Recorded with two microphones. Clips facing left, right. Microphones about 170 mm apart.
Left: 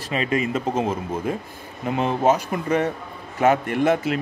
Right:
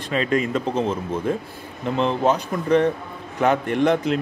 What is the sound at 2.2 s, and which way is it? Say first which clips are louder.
A man's voice: left 1 dB; 10° left (ahead or behind).